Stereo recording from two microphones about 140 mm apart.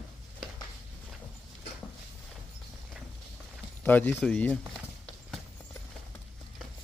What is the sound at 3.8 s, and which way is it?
Speech, 10° left (ahead or behind).